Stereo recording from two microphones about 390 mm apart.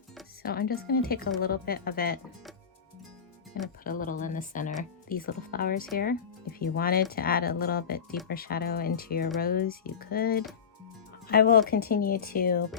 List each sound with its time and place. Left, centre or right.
0.4 s speech: left
3.8 s speech: left